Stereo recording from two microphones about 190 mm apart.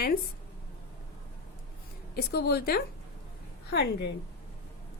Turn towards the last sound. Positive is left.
turn(degrees=60)  # may be behind; listen again after turning